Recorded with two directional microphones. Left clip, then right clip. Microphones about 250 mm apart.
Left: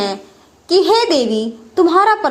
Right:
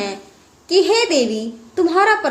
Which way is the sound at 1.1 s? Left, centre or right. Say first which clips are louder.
Left 2 dB; centre.